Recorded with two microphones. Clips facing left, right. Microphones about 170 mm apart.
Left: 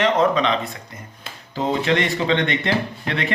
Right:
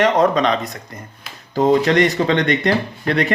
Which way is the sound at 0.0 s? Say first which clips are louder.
Right 3 dB; 40° right (ahead or behind).